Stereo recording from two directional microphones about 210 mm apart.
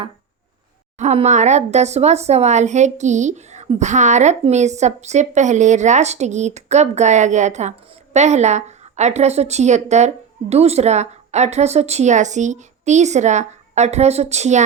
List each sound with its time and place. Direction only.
0.9 s speech: 30° right (ahead or behind)